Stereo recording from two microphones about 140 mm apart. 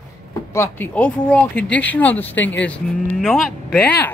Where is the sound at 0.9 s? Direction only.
10° left (ahead or behind).